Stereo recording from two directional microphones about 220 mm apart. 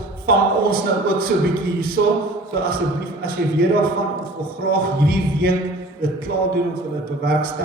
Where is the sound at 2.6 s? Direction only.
45° right (ahead or behind).